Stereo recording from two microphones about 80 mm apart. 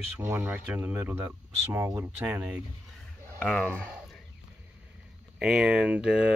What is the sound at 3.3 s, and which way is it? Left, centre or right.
Speech, centre.